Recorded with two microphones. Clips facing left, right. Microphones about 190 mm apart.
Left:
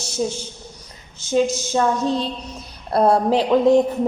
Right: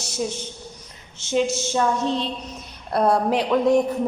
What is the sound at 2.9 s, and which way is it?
Speech, 30° left (ahead or behind).